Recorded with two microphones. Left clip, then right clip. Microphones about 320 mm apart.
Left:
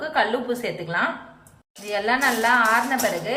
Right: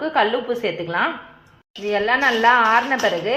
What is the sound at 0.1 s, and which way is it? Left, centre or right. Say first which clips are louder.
Speech: right 3 dB; centre.